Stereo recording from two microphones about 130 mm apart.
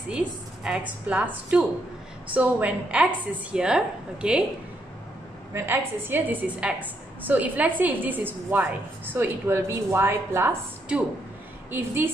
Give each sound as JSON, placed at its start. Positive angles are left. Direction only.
{"t": 0.7, "sound": "a woman's voice", "side_deg": -10}
{"t": 5.5, "sound": "a woman's voice", "side_deg": -15}